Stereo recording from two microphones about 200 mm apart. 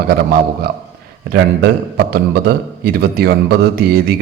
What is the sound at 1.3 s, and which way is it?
A man's voice, 55° right (ahead or behind).